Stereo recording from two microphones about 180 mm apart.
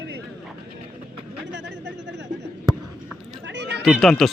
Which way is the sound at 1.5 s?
75° right (ahead or behind).